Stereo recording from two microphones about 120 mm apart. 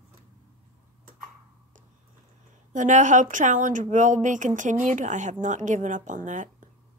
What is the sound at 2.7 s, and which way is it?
Speech, 90° right.